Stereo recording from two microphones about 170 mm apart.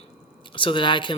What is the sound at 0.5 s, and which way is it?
Speech, 30° left (ahead or behind).